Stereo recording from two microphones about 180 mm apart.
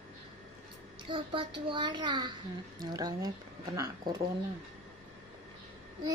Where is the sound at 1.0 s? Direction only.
30° right (ahead or behind).